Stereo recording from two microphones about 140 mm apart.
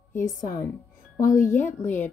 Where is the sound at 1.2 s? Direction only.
65° left (ahead or behind).